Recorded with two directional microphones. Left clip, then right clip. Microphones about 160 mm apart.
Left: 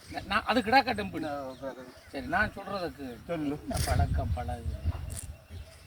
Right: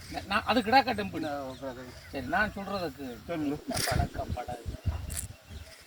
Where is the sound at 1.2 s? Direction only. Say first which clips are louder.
Right 1 dB; 10° left (ahead or behind).